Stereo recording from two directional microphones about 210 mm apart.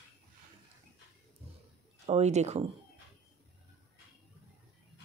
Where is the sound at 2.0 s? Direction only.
30° right (ahead or behind).